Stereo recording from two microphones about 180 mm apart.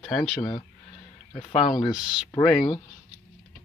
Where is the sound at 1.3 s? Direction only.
30° left (ahead or behind).